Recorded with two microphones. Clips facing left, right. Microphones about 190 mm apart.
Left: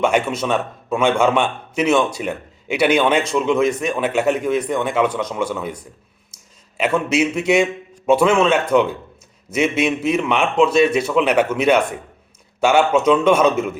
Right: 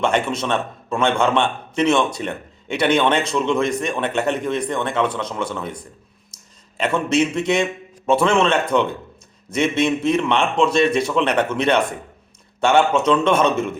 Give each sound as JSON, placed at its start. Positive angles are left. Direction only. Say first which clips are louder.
{"t": 0.0, "sound": "a man's voice", "louder": "left 2 dB", "side_deg": 10}